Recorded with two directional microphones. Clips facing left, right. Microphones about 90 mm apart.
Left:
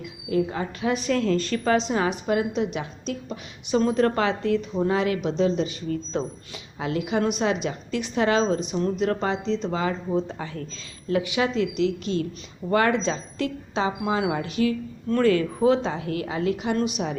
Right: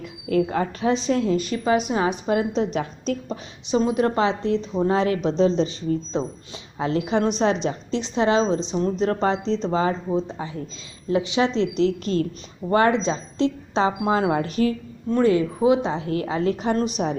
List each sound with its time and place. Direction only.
0.4 s a woman's voice: 40° right (ahead or behind)
0.9 s a woman's voice: 25° right (ahead or behind); by 3.3 s 40° right (ahead or behind)
3.7 s a woman's voice: 15° right (ahead or behind); by 9.9 s 35° right (ahead or behind)
10.1 s a woman's voice: 20° right (ahead or behind); by 12.2 s 40° right (ahead or behind)
12.7 s a woman's voice: 25° right (ahead or behind)
13.7 s a woman's voice: 35° right (ahead or behind)
15.1 s a woman's voice: 20° right (ahead or behind); by 17.2 s 35° right (ahead or behind)